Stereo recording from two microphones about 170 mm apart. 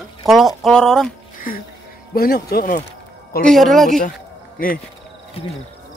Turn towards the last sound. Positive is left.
turn(degrees=55)  # may be behind; listen again after turning